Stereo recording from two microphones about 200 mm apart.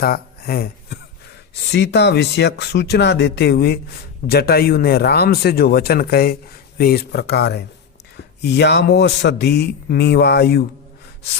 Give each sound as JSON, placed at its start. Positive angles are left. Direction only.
{"t": 0.0, "sound": "a man's voice", "side_deg": 50}